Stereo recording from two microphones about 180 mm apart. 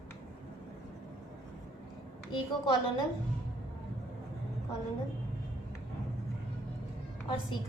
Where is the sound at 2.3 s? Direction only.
25° left (ahead or behind).